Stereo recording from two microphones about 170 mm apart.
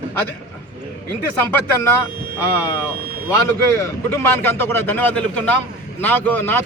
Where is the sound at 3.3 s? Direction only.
15° left (ahead or behind).